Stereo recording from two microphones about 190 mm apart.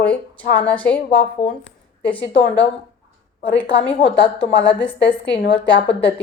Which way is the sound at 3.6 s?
5° left (ahead or behind).